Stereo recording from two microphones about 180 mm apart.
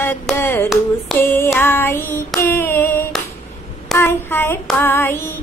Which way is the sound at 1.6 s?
10° left (ahead or behind).